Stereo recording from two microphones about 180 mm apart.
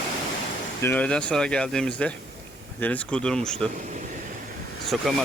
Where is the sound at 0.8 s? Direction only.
10° left (ahead or behind).